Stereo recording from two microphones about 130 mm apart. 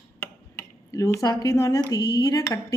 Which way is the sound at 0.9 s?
25° left (ahead or behind).